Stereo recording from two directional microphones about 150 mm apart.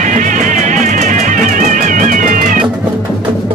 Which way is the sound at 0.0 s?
55° right (ahead or behind).